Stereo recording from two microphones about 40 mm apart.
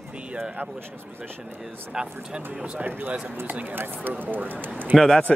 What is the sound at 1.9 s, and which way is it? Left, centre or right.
Speech, right.